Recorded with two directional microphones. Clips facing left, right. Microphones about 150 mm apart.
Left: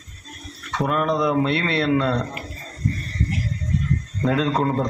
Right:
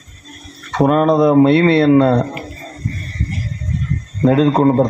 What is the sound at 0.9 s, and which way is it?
Speech, 45° right (ahead or behind).